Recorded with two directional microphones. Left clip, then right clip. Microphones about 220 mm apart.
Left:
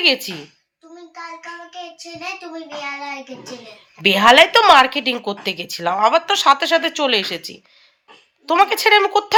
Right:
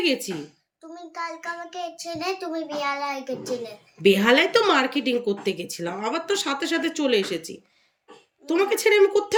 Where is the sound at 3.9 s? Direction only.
5° right (ahead or behind).